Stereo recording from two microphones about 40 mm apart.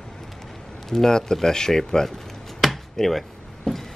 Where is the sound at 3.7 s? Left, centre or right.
Centre.